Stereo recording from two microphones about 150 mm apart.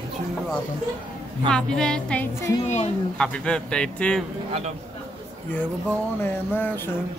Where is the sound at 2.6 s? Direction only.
50° left (ahead or behind).